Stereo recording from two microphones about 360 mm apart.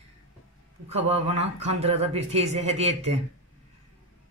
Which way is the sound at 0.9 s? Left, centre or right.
Centre.